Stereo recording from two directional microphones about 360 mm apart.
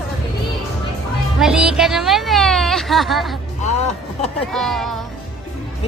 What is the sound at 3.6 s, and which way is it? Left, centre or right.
Speech, centre.